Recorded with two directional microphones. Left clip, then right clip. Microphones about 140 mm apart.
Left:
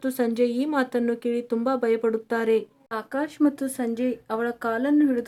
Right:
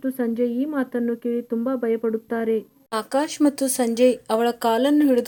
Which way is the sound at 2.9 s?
20° right (ahead or behind).